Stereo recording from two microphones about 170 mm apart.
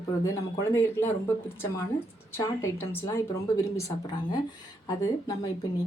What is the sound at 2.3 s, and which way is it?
Speech, 15° left (ahead or behind).